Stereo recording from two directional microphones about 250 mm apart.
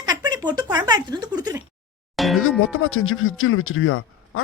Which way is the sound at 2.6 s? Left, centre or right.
Left.